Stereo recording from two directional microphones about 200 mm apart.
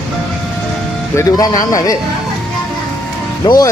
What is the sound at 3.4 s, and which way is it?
Speech, 20° left (ahead or behind).